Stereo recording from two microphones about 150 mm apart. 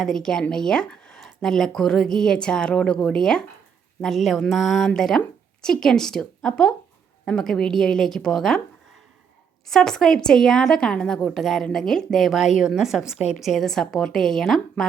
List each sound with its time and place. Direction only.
0.0 s a woman's voice: 5° left (ahead or behind)
9.6 s a woman's voice: 5° left (ahead or behind)
13.1 s a woman's voice: 50° left (ahead or behind)
13.4 s a woman's voice: centre (ahead or behind)